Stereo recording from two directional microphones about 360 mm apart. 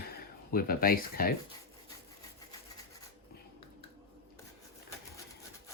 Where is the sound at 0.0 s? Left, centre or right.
Left.